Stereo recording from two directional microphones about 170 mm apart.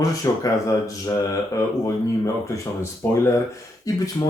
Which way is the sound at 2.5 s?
15° left (ahead or behind).